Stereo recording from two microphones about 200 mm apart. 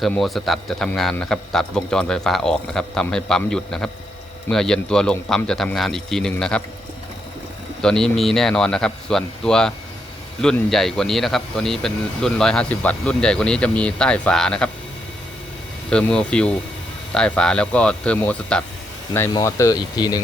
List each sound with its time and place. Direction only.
0.0 s a man's voice: centre (ahead or behind)
7.8 s a man's voice: 5° left (ahead or behind)
15.9 s a man's voice: 5° left (ahead or behind)
19.3 s speech: 15° left (ahead or behind)